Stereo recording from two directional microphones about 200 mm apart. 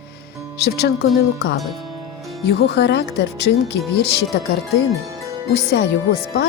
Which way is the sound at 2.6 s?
55° left (ahead or behind).